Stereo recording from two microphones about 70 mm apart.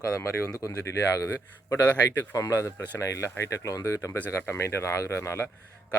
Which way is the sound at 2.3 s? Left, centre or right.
Left.